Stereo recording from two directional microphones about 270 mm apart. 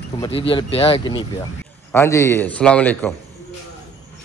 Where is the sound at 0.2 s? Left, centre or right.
Centre.